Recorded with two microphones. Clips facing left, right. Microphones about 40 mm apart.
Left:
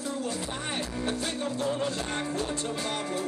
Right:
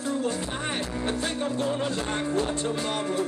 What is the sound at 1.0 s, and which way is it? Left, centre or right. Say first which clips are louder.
Music: right 3 dB; right.